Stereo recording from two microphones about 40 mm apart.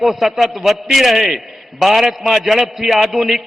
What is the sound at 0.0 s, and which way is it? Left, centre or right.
A man's voice, centre.